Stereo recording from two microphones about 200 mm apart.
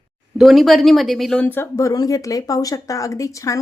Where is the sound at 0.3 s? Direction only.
Centre (ahead or behind).